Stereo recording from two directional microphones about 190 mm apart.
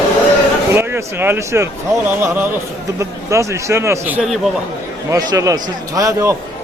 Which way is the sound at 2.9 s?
15° right (ahead or behind).